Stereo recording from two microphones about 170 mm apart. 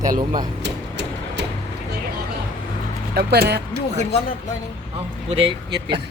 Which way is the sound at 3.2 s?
70° right (ahead or behind).